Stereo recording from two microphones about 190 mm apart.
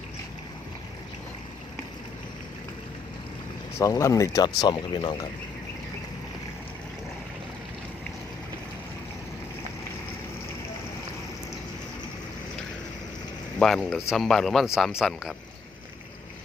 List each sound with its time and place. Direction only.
3.8 s speech: 15° left (ahead or behind)
13.6 s speech: 5° left (ahead or behind)